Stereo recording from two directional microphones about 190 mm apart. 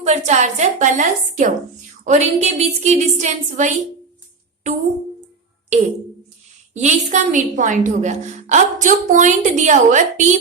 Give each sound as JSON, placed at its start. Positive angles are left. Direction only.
{"t": 0.0, "sound": "a woman's voice", "side_deg": -35}
{"t": 6.7, "sound": "a woman's voice", "side_deg": -40}